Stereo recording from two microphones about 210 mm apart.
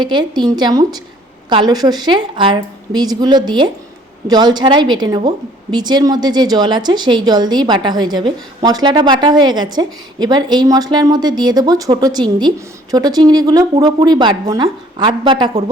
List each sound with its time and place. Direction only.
0.0 s a woman's voice: 20° right (ahead or behind)